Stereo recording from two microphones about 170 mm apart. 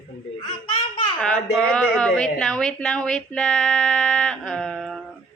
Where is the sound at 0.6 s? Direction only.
30° left (ahead or behind).